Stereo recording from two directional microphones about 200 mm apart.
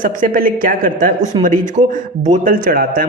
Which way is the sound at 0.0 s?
45° right (ahead or behind).